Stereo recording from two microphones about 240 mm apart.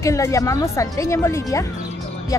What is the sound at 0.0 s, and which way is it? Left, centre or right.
A woman's voice, centre.